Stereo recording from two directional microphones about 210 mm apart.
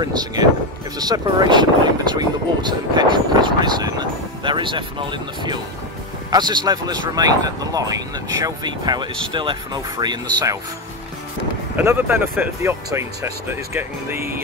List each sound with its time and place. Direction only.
0.0 s speech: 20° right (ahead or behind)
11.7 s speech: 10° right (ahead or behind)